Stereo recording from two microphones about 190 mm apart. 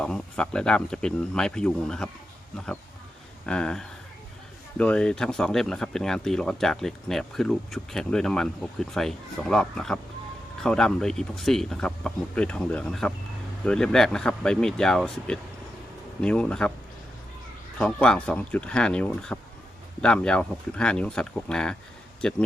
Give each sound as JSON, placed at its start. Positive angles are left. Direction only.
{"t": 0.0, "sound": "speech", "side_deg": 5}
{"t": 3.4, "sound": "speech", "side_deg": 5}
{"t": 17.7, "sound": "speech", "side_deg": 5}